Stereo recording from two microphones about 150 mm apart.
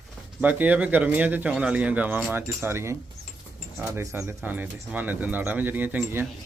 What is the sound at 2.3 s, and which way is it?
Speech, 15° right (ahead or behind).